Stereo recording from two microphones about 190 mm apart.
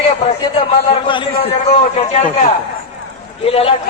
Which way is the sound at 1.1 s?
25° left (ahead or behind).